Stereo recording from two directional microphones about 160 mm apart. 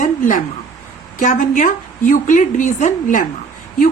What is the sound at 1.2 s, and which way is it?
A woman's voice, 50° left (ahead or behind).